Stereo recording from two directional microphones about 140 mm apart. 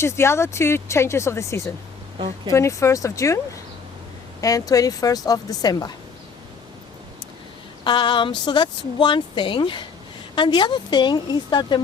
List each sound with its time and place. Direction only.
0.0 s speech: 20° left (ahead or behind)
2.1 s speech: 35° right (ahead or behind)
2.5 s speech: 20° left (ahead or behind)
7.9 s speech: 35° left (ahead or behind)